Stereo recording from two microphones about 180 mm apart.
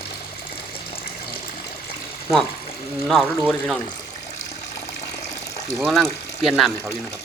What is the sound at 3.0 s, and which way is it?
Speech, centre (ahead or behind).